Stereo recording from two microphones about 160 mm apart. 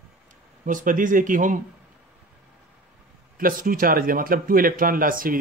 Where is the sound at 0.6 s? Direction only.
55° right (ahead or behind).